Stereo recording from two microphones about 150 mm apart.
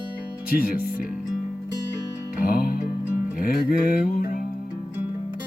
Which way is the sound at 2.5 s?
70° left (ahead or behind).